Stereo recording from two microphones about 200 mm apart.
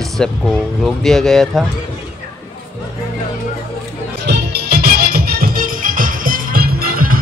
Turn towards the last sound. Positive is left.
turn(degrees=-45)  # may be behind; listen again after turning